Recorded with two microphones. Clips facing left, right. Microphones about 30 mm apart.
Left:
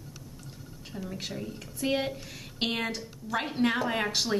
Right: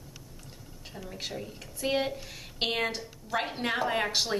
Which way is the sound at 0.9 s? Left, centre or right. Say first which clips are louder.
Left 1 dB; centre.